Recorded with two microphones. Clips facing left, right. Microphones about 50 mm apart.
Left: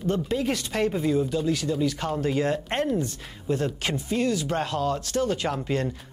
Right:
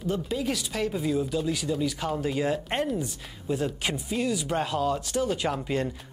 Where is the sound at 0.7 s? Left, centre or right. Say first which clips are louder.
Left 4 dB; centre.